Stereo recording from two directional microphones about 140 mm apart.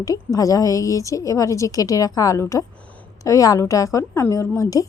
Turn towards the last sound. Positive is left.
turn(degrees=25)  # may be behind; listen again after turning